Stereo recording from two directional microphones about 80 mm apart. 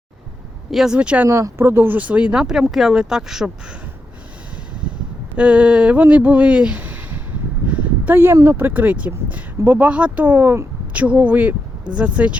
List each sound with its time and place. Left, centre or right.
0.7 s speech: centre
0.9 s speech: centre
1.3 s speech: right; by 3.5 s centre
5.4 s a sound: centre
8.4 s speech: right